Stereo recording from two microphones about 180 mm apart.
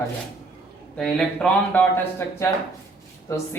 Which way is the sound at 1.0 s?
5° left (ahead or behind).